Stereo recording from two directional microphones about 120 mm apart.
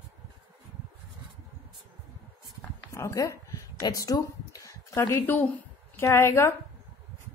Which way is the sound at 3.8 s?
30° left (ahead or behind).